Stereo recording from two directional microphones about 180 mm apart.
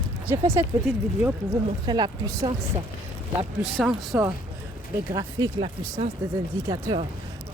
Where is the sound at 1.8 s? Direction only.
25° right (ahead or behind).